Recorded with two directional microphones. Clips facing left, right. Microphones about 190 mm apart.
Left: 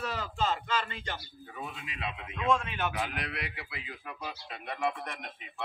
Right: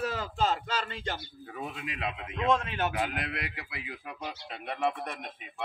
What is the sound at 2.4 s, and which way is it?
Speech, 40° right (ahead or behind).